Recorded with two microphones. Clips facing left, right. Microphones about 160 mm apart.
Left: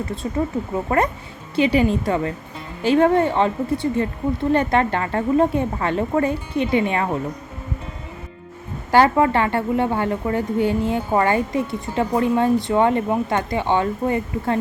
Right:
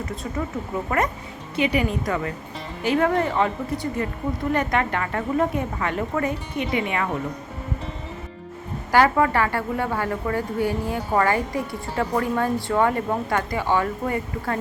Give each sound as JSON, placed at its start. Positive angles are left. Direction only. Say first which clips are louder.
{"t": 0.9, "sound": "a woman's voice", "louder": "left 4 dB", "side_deg": 30}
{"t": 8.9, "sound": "a woman's voice", "louder": "left 3 dB", "side_deg": 25}